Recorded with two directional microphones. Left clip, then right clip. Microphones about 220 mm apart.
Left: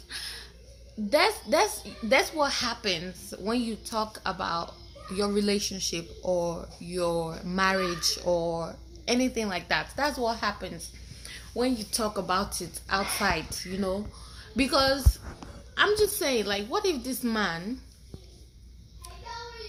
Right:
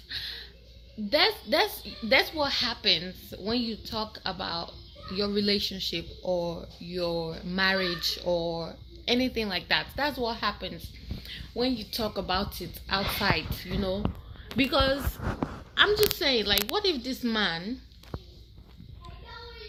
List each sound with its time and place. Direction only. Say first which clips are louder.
0.1 s music: right 2 dB; 15° left (ahead or behind)
1.1 s speech: left 1 dB; 15° left (ahead or behind)
14.5 s speech: left 1 dB; 10° left (ahead or behind)